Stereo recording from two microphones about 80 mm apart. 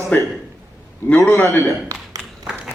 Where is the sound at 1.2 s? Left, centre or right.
Left.